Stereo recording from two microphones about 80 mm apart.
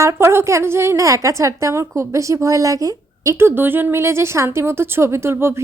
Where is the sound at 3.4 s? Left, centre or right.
Right.